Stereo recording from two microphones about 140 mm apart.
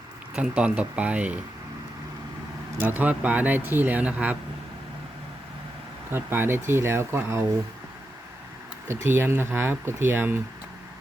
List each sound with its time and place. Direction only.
0.3 s speech: 10° right (ahead or behind)
2.7 s speech: 15° right (ahead or behind)
6.1 s speech: 15° right (ahead or behind)
8.9 s speech: 15° right (ahead or behind)